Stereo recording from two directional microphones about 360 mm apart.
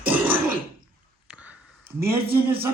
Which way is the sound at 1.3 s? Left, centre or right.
Centre.